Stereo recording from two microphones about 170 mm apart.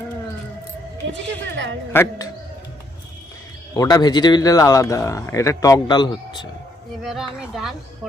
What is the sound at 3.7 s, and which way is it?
Speech, 25° left (ahead or behind).